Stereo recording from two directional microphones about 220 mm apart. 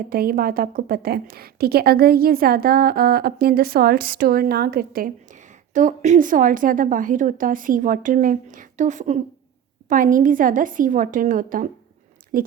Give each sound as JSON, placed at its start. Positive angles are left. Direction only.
{"t": 0.1, "sound": "a woman's voice", "side_deg": -40}